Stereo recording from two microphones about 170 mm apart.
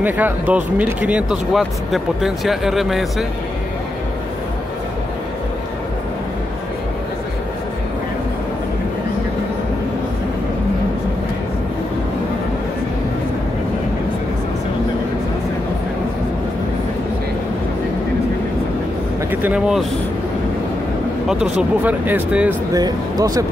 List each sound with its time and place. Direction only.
0.0 s speech: 10° right (ahead or behind)
19.4 s speech: 5° right (ahead or behind)
21.3 s speech: 5° right (ahead or behind)
22.7 s speech: 25° right (ahead or behind)